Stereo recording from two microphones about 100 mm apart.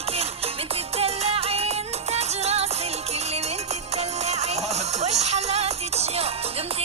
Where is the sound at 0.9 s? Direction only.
90° right.